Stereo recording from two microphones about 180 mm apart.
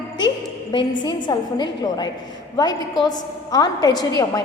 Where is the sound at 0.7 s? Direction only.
25° left (ahead or behind).